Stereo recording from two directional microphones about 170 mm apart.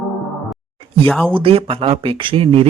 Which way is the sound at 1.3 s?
35° right (ahead or behind).